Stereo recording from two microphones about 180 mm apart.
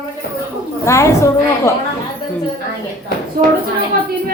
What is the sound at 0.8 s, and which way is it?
Speech, 15° left (ahead or behind).